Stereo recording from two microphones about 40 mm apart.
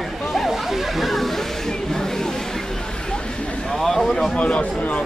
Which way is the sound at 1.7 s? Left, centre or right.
Centre.